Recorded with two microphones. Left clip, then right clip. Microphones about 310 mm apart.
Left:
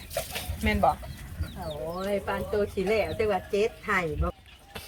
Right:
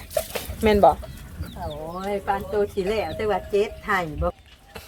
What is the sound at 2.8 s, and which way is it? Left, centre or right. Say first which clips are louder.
Speech: right 1 dB; right.